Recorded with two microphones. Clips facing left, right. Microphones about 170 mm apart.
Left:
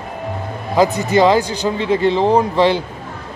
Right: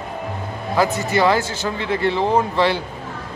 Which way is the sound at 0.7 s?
15° left (ahead or behind).